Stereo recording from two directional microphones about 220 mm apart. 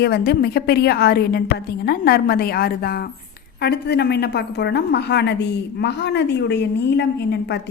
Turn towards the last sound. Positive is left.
turn(degrees=50)  # may be behind; listen again after turning